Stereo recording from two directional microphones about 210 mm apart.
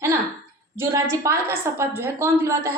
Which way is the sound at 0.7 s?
15° right (ahead or behind).